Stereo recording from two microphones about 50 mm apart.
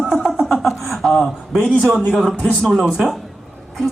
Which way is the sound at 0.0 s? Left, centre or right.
Centre.